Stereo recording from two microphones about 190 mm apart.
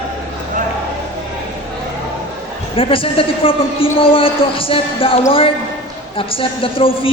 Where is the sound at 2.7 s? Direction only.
30° left (ahead or behind).